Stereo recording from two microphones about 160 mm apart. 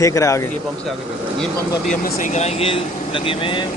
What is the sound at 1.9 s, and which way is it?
Speech, 45° left (ahead or behind).